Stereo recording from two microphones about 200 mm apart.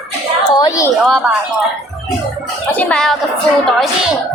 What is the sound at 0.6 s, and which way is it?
Speech, 15° left (ahead or behind).